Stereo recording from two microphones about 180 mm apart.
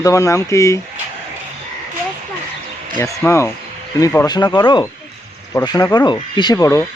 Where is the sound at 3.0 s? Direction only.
15° left (ahead or behind).